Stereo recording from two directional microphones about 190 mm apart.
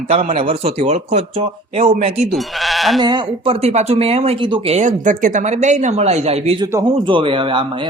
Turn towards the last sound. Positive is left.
turn(degrees=-25)  # may be behind; listen again after turning